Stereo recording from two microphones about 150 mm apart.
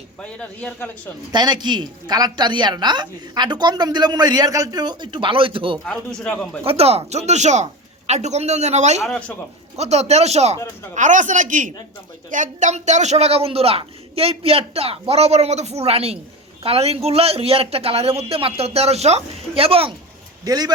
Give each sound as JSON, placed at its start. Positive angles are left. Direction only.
{"t": 0.2, "sound": "a man's voice", "side_deg": 10}
{"t": 1.3, "sound": "a woman's voice", "side_deg": -30}
{"t": 5.8, "sound": "a man's voice", "side_deg": 5}
{"t": 6.7, "sound": "speech", "side_deg": -40}
{"t": 9.0, "sound": "speech", "side_deg": 5}
{"t": 9.7, "sound": "speech", "side_deg": -45}
{"t": 10.9, "sound": "a woman's voice", "side_deg": -55}
{"t": 20.4, "sound": "a woman's voice", "side_deg": -25}